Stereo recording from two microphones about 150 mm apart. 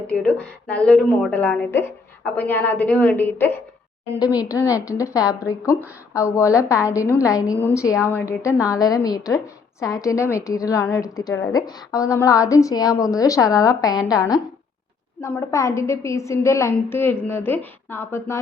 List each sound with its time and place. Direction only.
0.1 s a woman's voice: 10° left (ahead or behind)